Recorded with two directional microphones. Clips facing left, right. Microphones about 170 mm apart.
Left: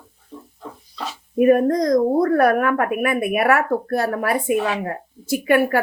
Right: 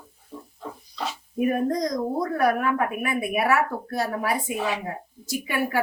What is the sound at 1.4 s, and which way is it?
A woman's voice, 65° left (ahead or behind).